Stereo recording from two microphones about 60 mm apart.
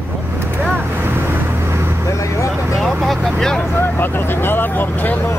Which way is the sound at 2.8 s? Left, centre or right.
Centre.